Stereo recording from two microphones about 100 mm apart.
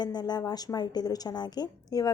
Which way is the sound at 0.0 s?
45° left (ahead or behind).